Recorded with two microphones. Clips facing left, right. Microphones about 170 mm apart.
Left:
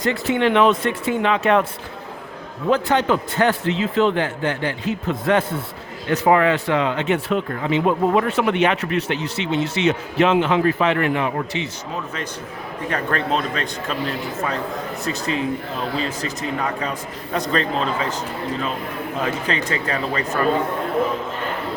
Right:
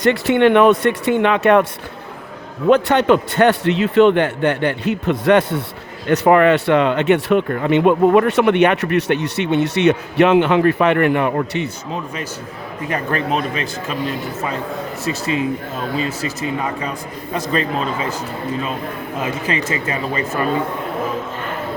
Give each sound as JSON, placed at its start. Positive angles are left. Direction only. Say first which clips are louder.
{"t": 0.0, "sound": "speech", "louder": "right 6 dB", "side_deg": -75}
{"t": 2.6, "sound": "a man's voice", "louder": "right 5 dB", "side_deg": -70}
{"t": 6.1, "sound": "speech", "louder": "right 4 dB", "side_deg": -60}
{"t": 12.9, "sound": "a man's voice", "louder": "right 2 dB", "side_deg": -10}
{"t": 15.0, "sound": "a man's voice", "louder": "right 3 dB", "side_deg": -5}
{"t": 19.2, "sound": "a man's voice", "louder": "right 2 dB", "side_deg": -5}